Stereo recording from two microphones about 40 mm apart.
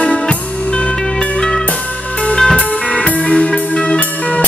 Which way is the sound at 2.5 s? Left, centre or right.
Left.